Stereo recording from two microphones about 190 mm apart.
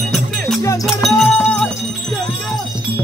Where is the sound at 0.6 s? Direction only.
15° left (ahead or behind).